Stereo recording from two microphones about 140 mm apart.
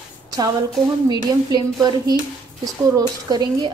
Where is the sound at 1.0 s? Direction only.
30° right (ahead or behind).